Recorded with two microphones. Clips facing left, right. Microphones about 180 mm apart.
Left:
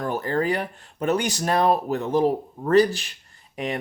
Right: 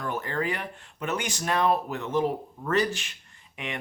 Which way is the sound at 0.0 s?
35° left (ahead or behind).